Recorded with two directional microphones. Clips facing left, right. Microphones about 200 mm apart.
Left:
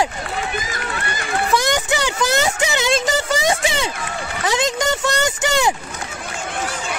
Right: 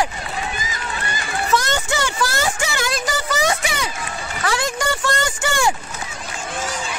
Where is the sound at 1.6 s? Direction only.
15° left (ahead or behind).